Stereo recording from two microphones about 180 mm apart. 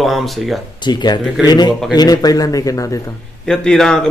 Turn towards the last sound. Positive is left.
turn(degrees=5)  # may be behind; listen again after turning